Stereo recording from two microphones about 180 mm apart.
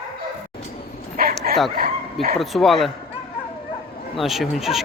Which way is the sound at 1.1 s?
50° right (ahead or behind).